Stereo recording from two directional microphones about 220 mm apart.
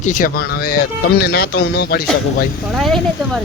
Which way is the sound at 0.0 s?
35° left (ahead or behind).